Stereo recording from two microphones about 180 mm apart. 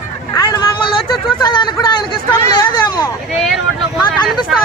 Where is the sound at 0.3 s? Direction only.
25° left (ahead or behind).